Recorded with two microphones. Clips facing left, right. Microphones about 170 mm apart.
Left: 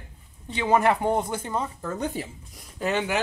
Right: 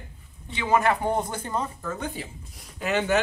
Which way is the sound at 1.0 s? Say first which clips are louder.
Left 2 dB; 10° left (ahead or behind).